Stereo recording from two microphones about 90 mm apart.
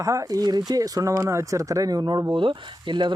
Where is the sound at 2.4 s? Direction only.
65° right (ahead or behind).